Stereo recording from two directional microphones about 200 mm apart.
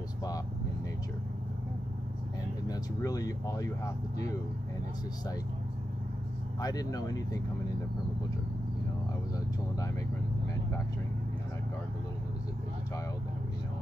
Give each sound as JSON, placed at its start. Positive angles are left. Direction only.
{"t": 2.7, "sound": "speech", "side_deg": 15}
{"t": 6.6, "sound": "speech", "side_deg": 20}